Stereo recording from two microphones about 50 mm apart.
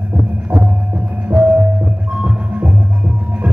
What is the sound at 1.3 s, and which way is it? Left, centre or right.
Music, right.